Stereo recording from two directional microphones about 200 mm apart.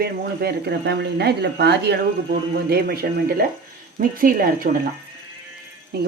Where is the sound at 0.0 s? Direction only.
55° right (ahead or behind).